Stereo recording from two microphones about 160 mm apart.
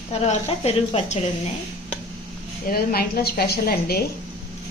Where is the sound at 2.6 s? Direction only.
70° left (ahead or behind).